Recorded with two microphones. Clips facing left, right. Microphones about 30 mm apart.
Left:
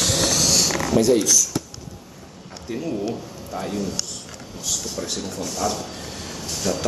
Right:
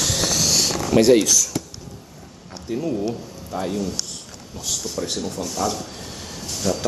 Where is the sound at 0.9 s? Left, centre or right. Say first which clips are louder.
Right 3 dB; right.